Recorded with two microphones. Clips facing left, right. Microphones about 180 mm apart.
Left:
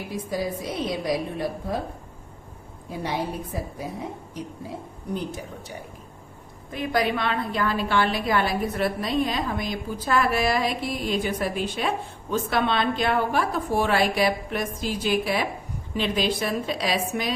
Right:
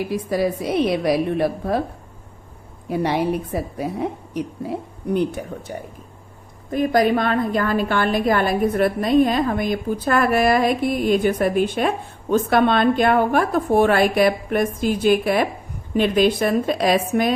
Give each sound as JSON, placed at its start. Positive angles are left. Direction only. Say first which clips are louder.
{"t": 0.1, "sound": "a woman's voice", "louder": "right 3 dB", "side_deg": -65}
{"t": 2.9, "sound": "a woman's voice", "louder": "right 8 dB", "side_deg": -65}
{"t": 6.7, "sound": "a woman's voice", "louder": "right 7 dB", "side_deg": -45}